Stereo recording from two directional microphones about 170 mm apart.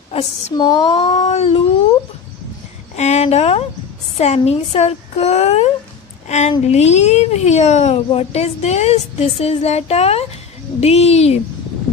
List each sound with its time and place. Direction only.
0.1 s a child's voice: 40° left (ahead or behind)
0.6 s female singing: 25° left (ahead or behind)
1.1 s a child's voice: 40° left (ahead or behind)
3.0 s a child's voice: 40° left (ahead or behind)